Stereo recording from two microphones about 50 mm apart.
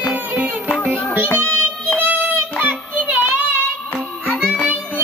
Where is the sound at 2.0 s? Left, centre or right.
Right.